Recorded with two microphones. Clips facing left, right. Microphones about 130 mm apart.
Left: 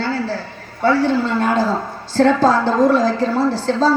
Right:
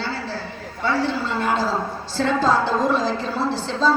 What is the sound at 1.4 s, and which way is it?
A woman's voice, 45° left (ahead or behind).